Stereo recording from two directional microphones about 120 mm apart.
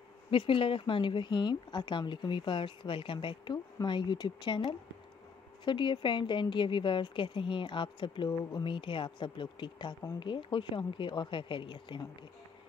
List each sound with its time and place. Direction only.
0.3 s a woman's voice: 45° left (ahead or behind)
5.7 s a woman's voice: 40° left (ahead or behind)